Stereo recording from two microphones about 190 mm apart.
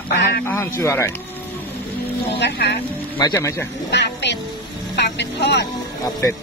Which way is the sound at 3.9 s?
65° left (ahead or behind).